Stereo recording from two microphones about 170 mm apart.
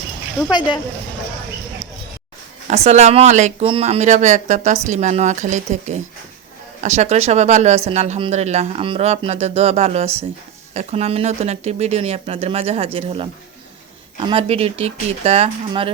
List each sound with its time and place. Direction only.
0.5 s speech: 25° left (ahead or behind)
2.6 s speech: 40° right (ahead or behind)